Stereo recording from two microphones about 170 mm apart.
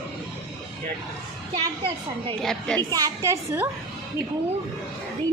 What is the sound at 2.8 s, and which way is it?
Speech, 20° right (ahead or behind).